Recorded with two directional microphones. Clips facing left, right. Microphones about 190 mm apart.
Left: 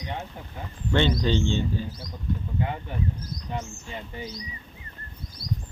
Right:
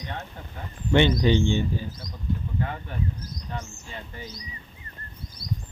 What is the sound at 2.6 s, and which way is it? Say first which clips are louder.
Speech: left 3 dB; 15° left (ahead or behind).